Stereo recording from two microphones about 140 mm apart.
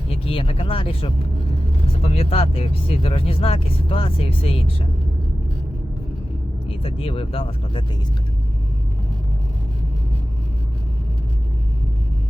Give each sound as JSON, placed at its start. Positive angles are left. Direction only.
{"t": 0.1, "sound": "speech", "side_deg": 40}
{"t": 6.7, "sound": "speech", "side_deg": 40}